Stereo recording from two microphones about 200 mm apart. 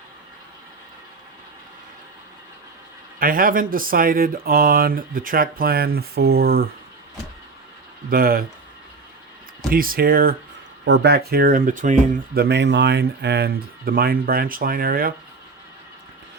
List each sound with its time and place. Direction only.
3.2 s speech: 45° right (ahead or behind)
8.1 s speech: 45° right (ahead or behind)
9.6 s speech: 45° right (ahead or behind)
10.8 s speech: 60° right (ahead or behind)